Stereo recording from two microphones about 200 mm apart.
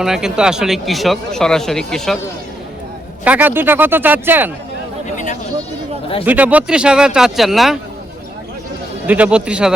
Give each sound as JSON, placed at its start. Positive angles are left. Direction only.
{"t": 0.0, "sound": "speech", "side_deg": 0}
{"t": 3.2, "sound": "speech", "side_deg": -10}
{"t": 5.1, "sound": "speech", "side_deg": 35}
{"t": 6.2, "sound": "speech", "side_deg": -10}
{"t": 9.0, "sound": "speech", "side_deg": -5}